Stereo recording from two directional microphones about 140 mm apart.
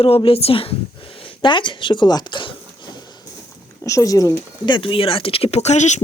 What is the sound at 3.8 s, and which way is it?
Speech, 20° left (ahead or behind).